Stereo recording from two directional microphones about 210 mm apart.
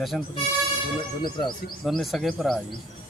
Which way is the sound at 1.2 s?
20° left (ahead or behind).